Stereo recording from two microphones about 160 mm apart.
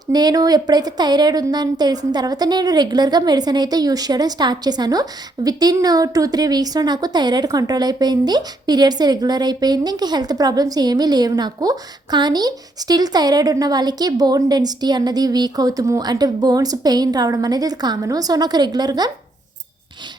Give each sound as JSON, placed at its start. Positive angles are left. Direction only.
{"t": 0.1, "sound": "a woman's voice", "side_deg": -25}